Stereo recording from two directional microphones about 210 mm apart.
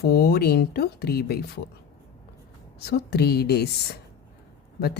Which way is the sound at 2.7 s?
50° left (ahead or behind).